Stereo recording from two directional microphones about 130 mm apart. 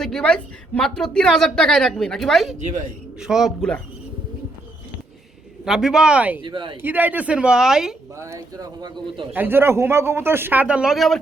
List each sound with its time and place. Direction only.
0.0 s a woman's voice: 5° left (ahead or behind)
5.6 s a woman's voice: 5° right (ahead or behind)
6.4 s speech: 40° right (ahead or behind)
6.8 s speech: 15° right (ahead or behind)
8.2 s speech: 25° right (ahead or behind)
9.3 s speech: 15° right (ahead or behind); by 11.2 s centre (ahead or behind)